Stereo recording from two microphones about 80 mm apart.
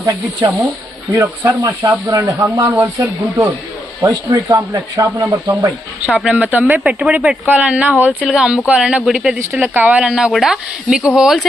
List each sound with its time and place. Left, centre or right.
1.1 s speech: right
2.7 s speech: right
4.0 s speech: right
6.1 s speech: centre
9.6 s speech: right
10.0 s speech: centre